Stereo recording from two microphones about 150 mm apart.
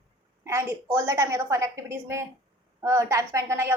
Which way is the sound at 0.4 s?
20° right (ahead or behind).